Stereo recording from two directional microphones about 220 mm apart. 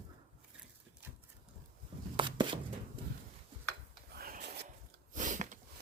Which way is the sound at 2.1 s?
20° right (ahead or behind).